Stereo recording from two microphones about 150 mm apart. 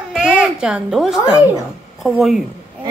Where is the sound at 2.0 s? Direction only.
Centre (ahead or behind).